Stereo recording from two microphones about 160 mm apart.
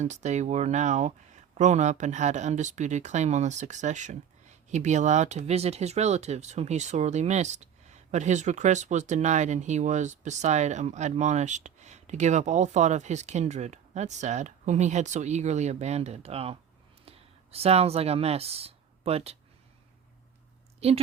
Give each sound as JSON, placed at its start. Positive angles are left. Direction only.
{"t": 0.0, "sound": "speech", "side_deg": -45}
{"t": 20.8, "sound": "a woman's voice", "side_deg": -40}